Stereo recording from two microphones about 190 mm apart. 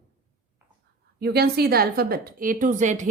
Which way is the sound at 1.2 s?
55° right (ahead or behind).